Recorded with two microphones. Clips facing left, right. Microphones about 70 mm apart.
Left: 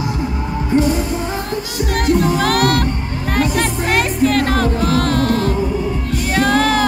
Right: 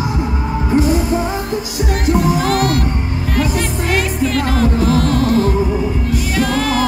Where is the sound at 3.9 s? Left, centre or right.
Left.